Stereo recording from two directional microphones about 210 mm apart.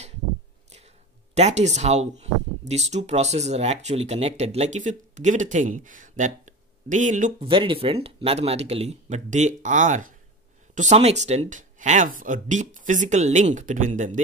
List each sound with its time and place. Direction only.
1.3 s speech: 35° right (ahead or behind)
7.4 s speech: 25° right (ahead or behind)